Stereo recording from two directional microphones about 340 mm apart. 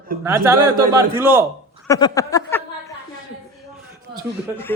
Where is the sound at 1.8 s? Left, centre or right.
Centre.